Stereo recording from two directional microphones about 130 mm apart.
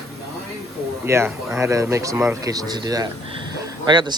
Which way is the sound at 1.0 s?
20° right (ahead or behind).